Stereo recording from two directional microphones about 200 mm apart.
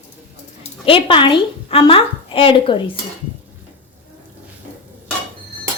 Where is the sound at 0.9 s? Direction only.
25° left (ahead or behind).